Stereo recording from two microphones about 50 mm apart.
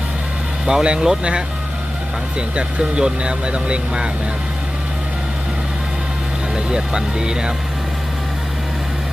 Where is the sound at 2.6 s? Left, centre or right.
Centre.